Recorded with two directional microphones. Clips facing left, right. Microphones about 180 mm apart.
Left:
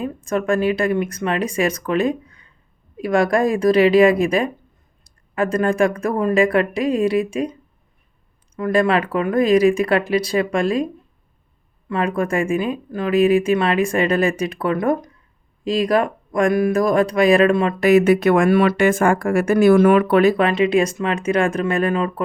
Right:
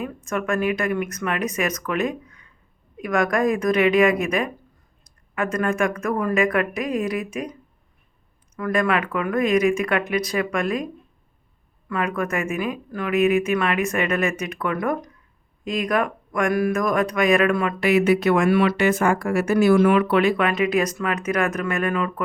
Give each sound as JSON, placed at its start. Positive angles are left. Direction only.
{"t": 0.0, "sound": "speech", "side_deg": 30}
{"t": 8.5, "sound": "speech", "side_deg": 25}
{"t": 11.9, "sound": "speech", "side_deg": 30}
{"t": 17.7, "sound": "speech", "side_deg": 45}
{"t": 20.5, "sound": "speech", "side_deg": 25}